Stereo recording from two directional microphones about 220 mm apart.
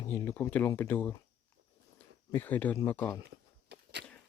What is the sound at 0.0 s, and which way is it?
Speech, 15° left (ahead or behind).